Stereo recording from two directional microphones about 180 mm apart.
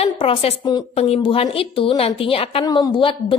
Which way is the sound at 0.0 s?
35° left (ahead or behind).